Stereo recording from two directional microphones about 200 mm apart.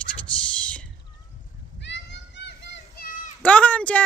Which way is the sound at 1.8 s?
60° left (ahead or behind).